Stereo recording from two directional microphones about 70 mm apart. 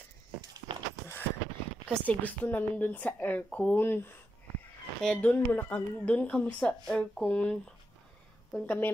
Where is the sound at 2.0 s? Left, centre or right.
Left.